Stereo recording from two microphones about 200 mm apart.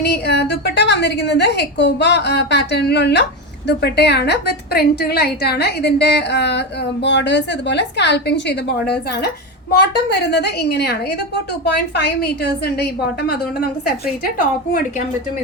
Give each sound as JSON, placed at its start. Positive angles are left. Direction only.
{"t": 0.0, "sound": "a woman's voice", "side_deg": 55}
{"t": 9.7, "sound": "a woman's voice", "side_deg": 55}